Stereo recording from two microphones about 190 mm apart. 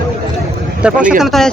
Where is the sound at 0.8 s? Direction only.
5° right (ahead or behind).